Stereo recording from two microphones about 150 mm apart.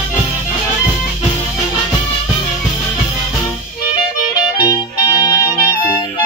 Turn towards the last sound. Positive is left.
turn(degrees=25)  # may be behind; listen again after turning